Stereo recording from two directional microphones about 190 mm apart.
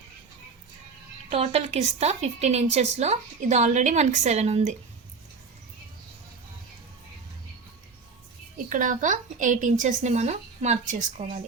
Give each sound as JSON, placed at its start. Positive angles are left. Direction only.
{"t": 1.3, "sound": "a woman's voice", "side_deg": -30}
{"t": 8.5, "sound": "a woman's voice", "side_deg": -45}